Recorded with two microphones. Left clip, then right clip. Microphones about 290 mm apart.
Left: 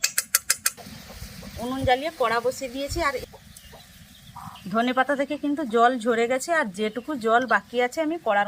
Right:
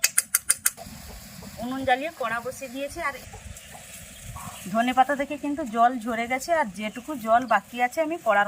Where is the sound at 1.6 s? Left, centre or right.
Left.